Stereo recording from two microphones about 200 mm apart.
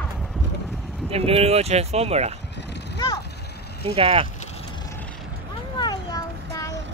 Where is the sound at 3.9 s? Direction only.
30° right (ahead or behind).